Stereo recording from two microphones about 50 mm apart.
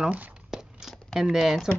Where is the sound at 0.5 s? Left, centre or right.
Centre.